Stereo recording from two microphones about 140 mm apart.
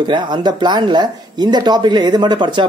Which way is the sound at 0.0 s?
35° right (ahead or behind).